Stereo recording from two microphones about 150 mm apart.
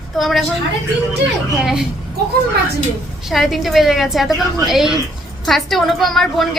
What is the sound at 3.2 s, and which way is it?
A woman's voice, centre (ahead or behind).